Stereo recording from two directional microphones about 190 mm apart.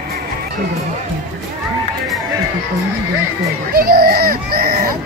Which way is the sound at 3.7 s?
50° right (ahead or behind).